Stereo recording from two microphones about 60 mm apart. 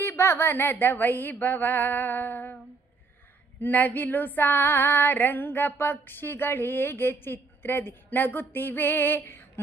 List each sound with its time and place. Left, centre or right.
0.0 s female singing: left
3.6 s female singing: left